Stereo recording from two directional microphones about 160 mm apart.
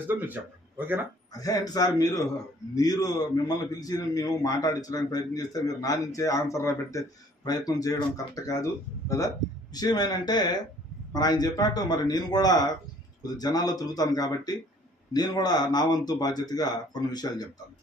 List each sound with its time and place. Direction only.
0.1 s speech: 10° right (ahead or behind)
1.3 s a man's voice: 20° left (ahead or behind)